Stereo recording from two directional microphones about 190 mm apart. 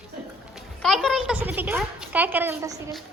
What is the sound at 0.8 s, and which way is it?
A child's voice, centre (ahead or behind).